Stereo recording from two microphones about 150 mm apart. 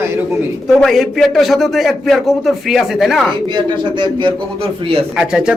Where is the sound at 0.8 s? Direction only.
Centre (ahead or behind).